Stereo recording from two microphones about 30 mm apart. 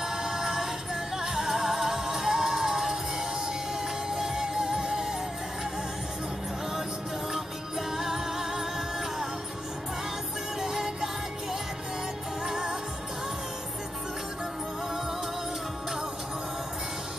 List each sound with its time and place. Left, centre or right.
0.0 s music: centre
7.9 s music: centre
10.6 s music: centre
12.4 s music: centre